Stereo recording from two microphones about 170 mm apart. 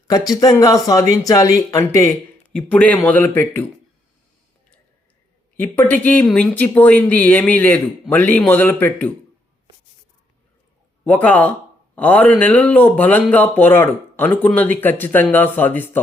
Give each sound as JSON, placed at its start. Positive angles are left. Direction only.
{"t": 0.1, "sound": "speech", "side_deg": 20}
{"t": 2.5, "sound": "speech", "side_deg": 5}
{"t": 5.5, "sound": "speech", "side_deg": 10}
{"t": 11.0, "sound": "speech", "side_deg": 10}